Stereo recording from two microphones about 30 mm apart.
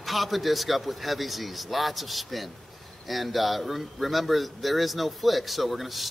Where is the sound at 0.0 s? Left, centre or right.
Centre.